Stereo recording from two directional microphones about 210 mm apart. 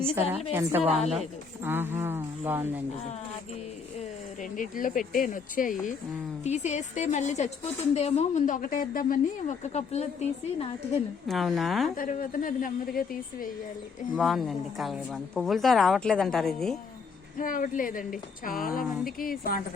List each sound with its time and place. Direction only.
0.7 s speech: 10° right (ahead or behind)
4.4 s a woman's voice: 40° left (ahead or behind)
11.3 s speech: centre (ahead or behind)
11.9 s a woman's voice: 40° left (ahead or behind)
14.2 s speech: centre (ahead or behind)
17.3 s a woman's voice: 40° left (ahead or behind)